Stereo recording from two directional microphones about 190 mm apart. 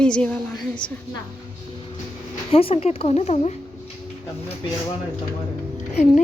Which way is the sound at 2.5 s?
30° left (ahead or behind).